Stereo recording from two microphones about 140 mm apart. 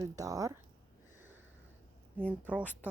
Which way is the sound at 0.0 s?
25° right (ahead or behind).